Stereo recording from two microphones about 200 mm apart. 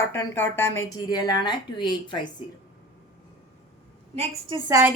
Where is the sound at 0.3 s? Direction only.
10° left (ahead or behind).